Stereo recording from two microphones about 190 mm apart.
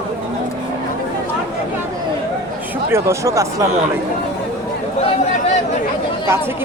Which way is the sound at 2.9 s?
15° right (ahead or behind).